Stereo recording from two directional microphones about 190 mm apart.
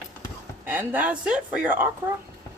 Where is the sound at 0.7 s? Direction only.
10° right (ahead or behind).